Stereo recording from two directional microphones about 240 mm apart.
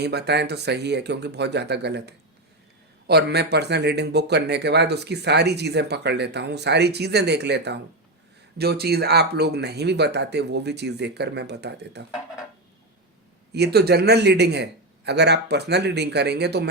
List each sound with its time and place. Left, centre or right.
0.0 s speech: right
13.5 s speech: right